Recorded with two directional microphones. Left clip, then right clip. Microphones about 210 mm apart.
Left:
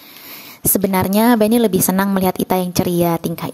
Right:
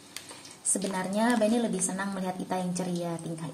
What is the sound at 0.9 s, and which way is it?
A woman's voice, 55° left (ahead or behind).